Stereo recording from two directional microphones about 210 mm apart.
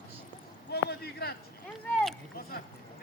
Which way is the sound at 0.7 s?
50° left (ahead or behind).